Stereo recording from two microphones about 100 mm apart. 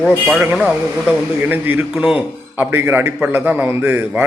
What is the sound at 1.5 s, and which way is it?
A man's voice, 20° right (ahead or behind).